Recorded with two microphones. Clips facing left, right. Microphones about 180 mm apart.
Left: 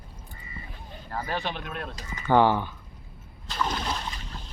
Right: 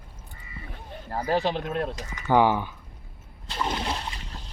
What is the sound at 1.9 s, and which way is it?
Speech, 10° right (ahead or behind).